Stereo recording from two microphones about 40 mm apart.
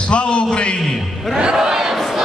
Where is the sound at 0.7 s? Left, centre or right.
Centre.